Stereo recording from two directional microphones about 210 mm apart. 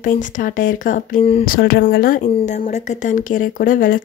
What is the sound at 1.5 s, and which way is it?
A woman's voice, 45° left (ahead or behind).